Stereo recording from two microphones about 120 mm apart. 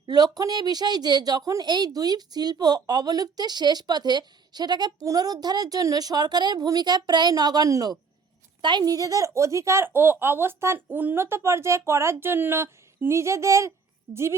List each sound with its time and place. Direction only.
0.0 s a woman's voice: 35° right (ahead or behind)